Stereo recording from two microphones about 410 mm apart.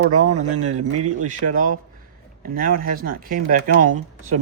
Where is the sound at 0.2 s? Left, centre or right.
Centre.